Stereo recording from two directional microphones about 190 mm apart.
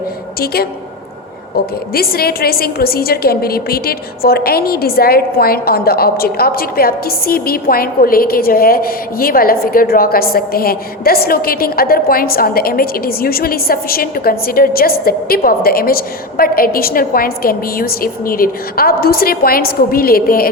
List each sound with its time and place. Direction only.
0.3 s a woman's voice: 55° left (ahead or behind)